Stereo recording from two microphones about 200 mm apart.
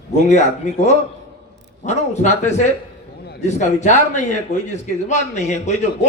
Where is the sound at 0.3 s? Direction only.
35° left (ahead or behind).